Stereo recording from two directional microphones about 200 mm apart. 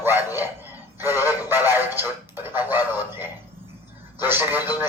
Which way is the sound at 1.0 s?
10° right (ahead or behind).